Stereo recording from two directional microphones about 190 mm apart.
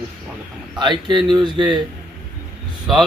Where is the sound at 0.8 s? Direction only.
25° right (ahead or behind).